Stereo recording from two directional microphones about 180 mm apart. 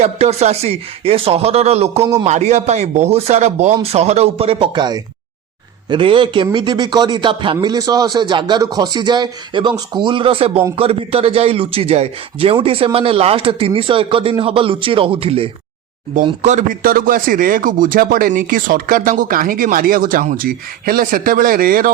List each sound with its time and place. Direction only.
0.0 s a man's voice: 35° right (ahead or behind); by 21.9 s 55° right (ahead or behind)